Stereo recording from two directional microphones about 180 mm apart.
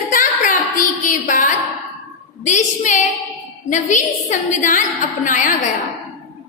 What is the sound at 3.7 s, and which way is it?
A woman's voice, 40° left (ahead or behind).